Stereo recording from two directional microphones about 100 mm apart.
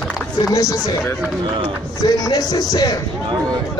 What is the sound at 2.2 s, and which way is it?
Speech, 40° left (ahead or behind).